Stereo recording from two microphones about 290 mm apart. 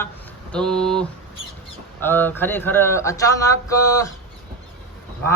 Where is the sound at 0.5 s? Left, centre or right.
Centre.